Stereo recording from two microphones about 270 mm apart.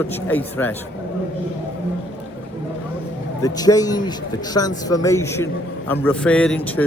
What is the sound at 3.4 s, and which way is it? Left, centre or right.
A man's voice, centre.